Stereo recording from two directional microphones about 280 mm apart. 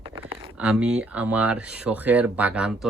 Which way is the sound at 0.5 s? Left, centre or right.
Centre.